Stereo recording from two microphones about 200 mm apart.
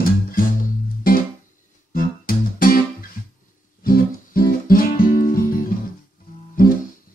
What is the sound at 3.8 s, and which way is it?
Music, 45° left (ahead or behind).